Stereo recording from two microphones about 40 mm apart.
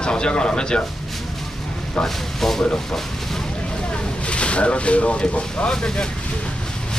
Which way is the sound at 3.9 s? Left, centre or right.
Left.